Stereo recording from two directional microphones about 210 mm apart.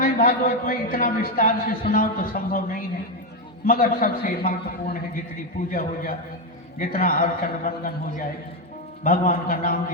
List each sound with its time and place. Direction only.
0.0 s a man's voice: 40° left (ahead or behind)
9.0 s a man's voice: 40° left (ahead or behind)